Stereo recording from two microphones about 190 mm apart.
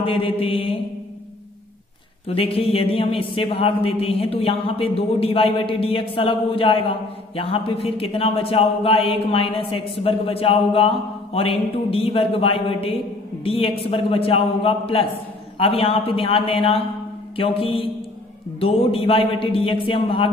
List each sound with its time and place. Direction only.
0.0 s speech: 30° left (ahead or behind)
2.2 s a man's voice: 30° left (ahead or behind)